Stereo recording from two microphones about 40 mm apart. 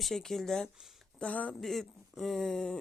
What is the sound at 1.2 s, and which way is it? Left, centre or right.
Speech, left.